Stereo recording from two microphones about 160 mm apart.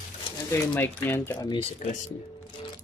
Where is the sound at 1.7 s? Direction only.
45° left (ahead or behind).